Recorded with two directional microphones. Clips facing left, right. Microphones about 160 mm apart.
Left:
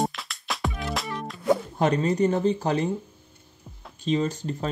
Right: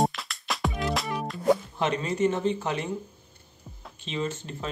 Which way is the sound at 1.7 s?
40° left (ahead or behind).